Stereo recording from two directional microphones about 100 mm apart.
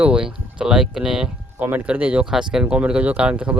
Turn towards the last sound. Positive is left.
turn(degrees=-10)  # may be behind; listen again after turning